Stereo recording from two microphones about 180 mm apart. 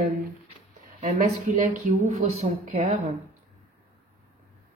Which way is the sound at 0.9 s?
45° right (ahead or behind).